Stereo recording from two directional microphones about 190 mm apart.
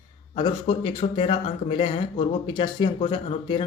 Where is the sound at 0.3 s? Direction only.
25° left (ahead or behind).